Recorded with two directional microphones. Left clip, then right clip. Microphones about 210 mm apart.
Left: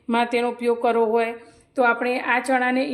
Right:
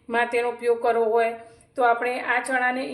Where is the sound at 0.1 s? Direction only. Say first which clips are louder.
Left 1 dB; 40° left (ahead or behind).